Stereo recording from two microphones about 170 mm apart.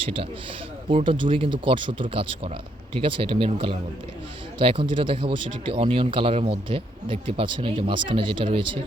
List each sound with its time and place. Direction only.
0.9 s speech: 30° right (ahead or behind)